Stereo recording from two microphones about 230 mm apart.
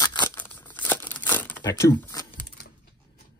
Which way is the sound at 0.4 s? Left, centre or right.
Centre.